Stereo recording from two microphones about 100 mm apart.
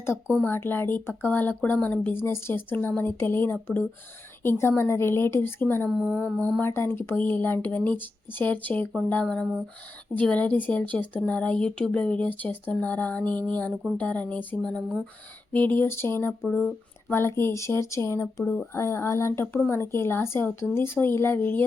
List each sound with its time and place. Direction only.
0.4 s speech: 20° left (ahead or behind)
2.2 s speech: 25° left (ahead or behind)
5.9 s a sound: 5° right (ahead or behind)
6.6 s speech: 20° left (ahead or behind)
10.2 s speech: 15° left (ahead or behind)
16.5 s speech: 5° left (ahead or behind)
17.1 s speech: 25° left (ahead or behind)
18.4 s speech: 15° left (ahead or behind)
18.7 s speech: 30° left (ahead or behind)